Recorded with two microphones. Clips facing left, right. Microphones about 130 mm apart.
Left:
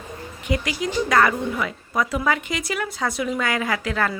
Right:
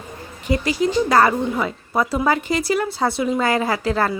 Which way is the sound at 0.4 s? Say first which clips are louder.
Right 5 dB; 35° right (ahead or behind).